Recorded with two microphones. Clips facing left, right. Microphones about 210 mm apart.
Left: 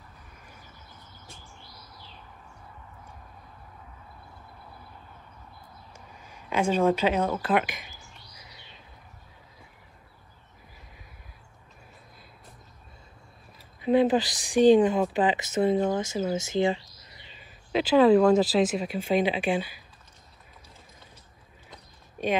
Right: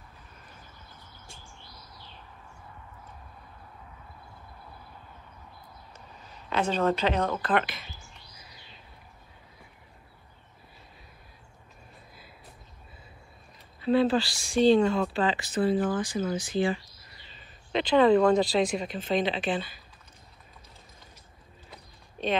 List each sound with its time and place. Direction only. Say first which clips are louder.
5.9 s speech: left 1 dB; 10° left (ahead or behind)
13.7 s speech: left 2 dB; 20° left (ahead or behind)
22.2 s a sound: left 2 dB; 10° left (ahead or behind)